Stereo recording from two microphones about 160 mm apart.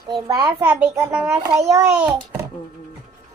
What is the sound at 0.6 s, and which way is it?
A child's voice, 5° right (ahead or behind).